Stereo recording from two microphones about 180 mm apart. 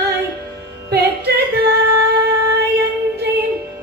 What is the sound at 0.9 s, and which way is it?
Female singing, 65° right (ahead or behind).